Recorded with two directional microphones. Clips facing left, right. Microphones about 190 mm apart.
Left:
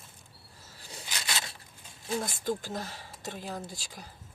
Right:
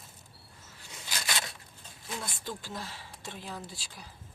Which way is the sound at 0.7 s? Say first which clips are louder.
Left 4 dB; 35° left (ahead or behind).